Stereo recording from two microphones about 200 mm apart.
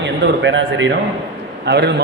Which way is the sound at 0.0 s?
65° right (ahead or behind).